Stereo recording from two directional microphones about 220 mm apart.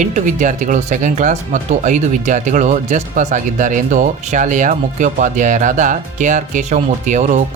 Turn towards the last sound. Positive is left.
turn(degrees=-35)  # may be behind; listen again after turning